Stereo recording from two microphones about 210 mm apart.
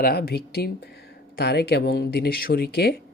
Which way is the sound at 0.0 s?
50° left (ahead or behind).